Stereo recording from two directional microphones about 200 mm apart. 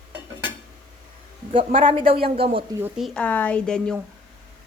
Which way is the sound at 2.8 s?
Centre (ahead or behind).